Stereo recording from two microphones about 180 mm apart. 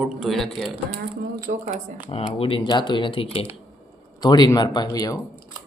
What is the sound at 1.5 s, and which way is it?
Speech, 45° right (ahead or behind).